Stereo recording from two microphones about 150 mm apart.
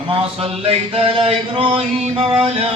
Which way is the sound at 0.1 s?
40° right (ahead or behind).